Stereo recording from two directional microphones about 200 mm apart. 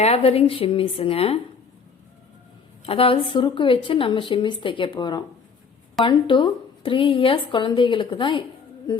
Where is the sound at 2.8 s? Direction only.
30° left (ahead or behind).